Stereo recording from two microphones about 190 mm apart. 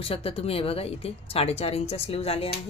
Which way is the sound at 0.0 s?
30° left (ahead or behind).